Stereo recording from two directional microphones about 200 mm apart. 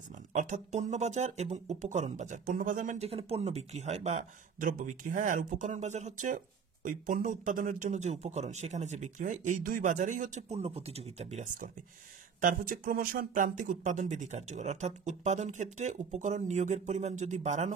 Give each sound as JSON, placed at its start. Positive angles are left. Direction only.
{"t": 0.3, "sound": "speech", "side_deg": -35}